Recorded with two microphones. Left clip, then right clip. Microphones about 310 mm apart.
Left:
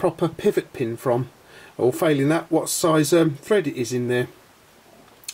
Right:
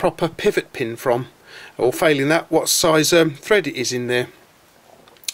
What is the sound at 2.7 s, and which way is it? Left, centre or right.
Speech, centre.